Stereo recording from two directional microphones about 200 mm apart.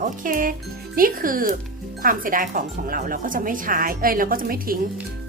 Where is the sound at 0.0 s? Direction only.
45° right (ahead or behind).